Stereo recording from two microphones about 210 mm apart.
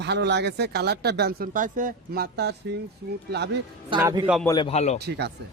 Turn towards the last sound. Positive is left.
turn(degrees=-55)  # may be behind; listen again after turning